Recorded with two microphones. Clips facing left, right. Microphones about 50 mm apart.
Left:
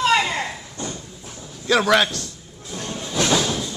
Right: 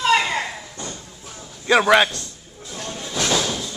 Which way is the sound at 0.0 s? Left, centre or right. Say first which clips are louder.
Even; centre.